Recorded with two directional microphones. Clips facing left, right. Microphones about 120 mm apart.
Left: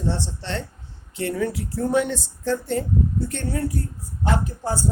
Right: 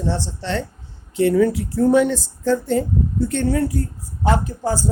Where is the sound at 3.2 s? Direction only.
90° right.